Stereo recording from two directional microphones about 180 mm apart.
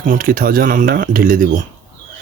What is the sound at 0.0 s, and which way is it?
Speech, 50° right (ahead or behind).